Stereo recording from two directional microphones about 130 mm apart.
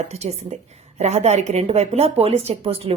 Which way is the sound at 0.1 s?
55° right (ahead or behind).